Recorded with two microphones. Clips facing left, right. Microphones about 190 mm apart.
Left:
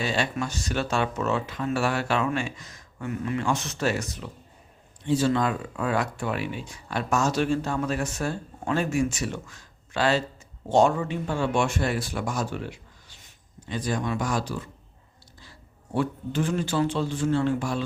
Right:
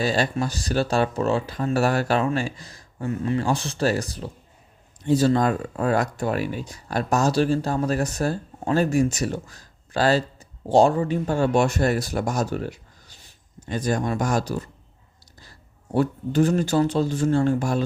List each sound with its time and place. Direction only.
0.0 s speech: 40° right (ahead or behind)
16.0 s speech: 40° right (ahead or behind)